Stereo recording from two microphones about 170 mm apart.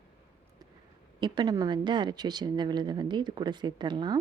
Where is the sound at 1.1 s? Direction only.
25° right (ahead or behind).